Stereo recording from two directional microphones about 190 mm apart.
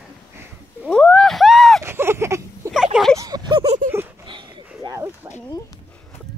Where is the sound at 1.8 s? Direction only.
15° right (ahead or behind).